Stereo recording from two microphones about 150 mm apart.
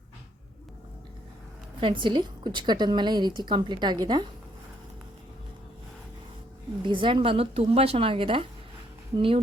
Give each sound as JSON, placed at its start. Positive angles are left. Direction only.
{"t": 1.8, "sound": "a woman's voice", "side_deg": -35}
{"t": 6.8, "sound": "a woman's voice", "side_deg": -35}